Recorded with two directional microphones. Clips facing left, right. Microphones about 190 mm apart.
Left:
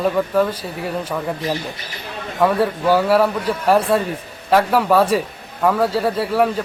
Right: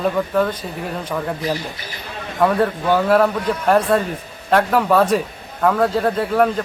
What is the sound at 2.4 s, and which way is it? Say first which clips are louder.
A man's voice: even; 5° left (ahead or behind).